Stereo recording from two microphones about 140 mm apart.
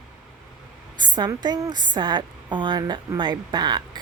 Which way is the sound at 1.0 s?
30° right (ahead or behind).